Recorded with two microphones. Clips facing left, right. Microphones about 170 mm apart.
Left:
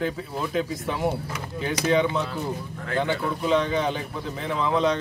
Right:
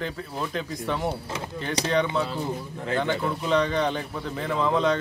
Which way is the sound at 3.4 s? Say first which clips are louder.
Left 1 dB; centre (ahead or behind).